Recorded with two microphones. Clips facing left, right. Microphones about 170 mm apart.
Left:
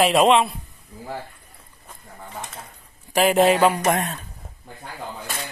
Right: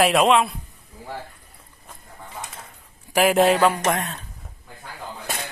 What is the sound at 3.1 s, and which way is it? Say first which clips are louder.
Speech: even; 5° right (ahead or behind).